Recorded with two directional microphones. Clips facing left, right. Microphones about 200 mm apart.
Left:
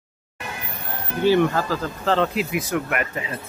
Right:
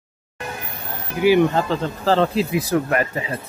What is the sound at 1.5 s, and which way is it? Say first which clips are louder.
Speech: right 3 dB; 25° right (ahead or behind).